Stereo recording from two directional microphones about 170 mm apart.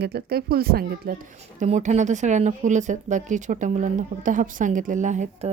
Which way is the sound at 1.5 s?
45° right (ahead or behind).